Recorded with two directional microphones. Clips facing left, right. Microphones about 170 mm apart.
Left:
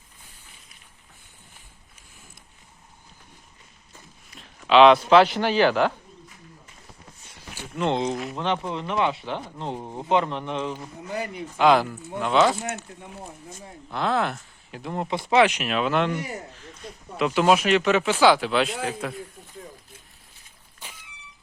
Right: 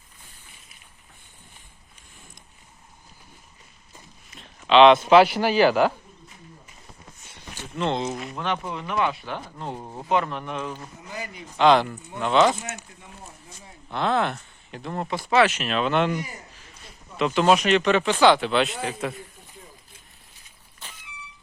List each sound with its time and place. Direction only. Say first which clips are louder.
4.3 s a sound: even; centre (ahead or behind)
5.0 s speech: right 1 dB; 10° right (ahead or behind)
7.5 s a sound: left 1 dB; 10° left (ahead or behind)
8.1 s speech: left 3 dB; centre (ahead or behind)
8.6 s speech: left 1 dB; 25° left (ahead or behind)
11.1 s speech: left 6 dB; 55° left (ahead or behind)
11.5 s speech: right 1 dB; 5° left (ahead or behind)
13.5 s speech: left 5 dB; 45° left (ahead or behind)
13.9 s speech: right 1 dB; centre (ahead or behind)
14.9 s speech: left 1 dB; 20° left (ahead or behind); by 16.1 s centre (ahead or behind)
17.2 s speech: even; 5° left (ahead or behind)
20.8 s vehicle: left 1 dB; 10° left (ahead or behind)